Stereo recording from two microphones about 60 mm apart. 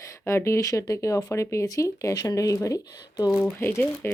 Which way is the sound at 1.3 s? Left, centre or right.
Left.